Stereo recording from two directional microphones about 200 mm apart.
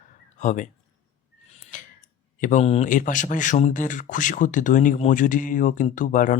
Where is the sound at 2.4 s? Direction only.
35° left (ahead or behind).